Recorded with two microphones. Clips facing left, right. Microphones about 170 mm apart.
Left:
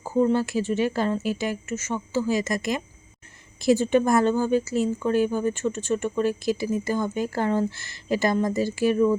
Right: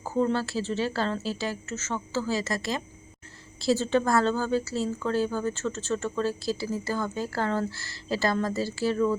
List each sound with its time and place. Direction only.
0.0 s a woman's voice: 15° left (ahead or behind)